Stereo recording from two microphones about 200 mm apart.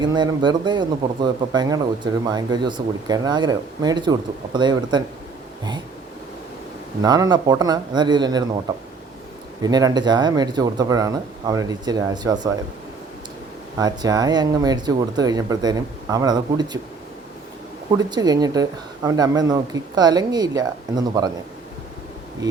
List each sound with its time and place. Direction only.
0.0 s speech: 20° right (ahead or behind)
7.0 s speech: 20° right (ahead or behind)
9.6 s speech: 20° right (ahead or behind)
13.7 s speech: 20° right (ahead or behind)
17.9 s speech: 20° right (ahead or behind)